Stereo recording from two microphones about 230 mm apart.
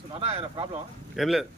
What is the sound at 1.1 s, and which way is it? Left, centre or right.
Speech, centre.